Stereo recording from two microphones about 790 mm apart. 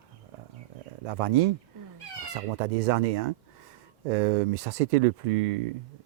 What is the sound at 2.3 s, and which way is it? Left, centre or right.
Speech, right.